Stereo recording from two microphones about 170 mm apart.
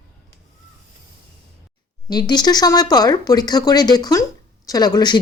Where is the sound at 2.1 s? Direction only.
25° left (ahead or behind).